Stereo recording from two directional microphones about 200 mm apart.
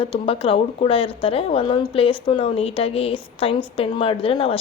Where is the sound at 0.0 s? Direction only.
25° left (ahead or behind).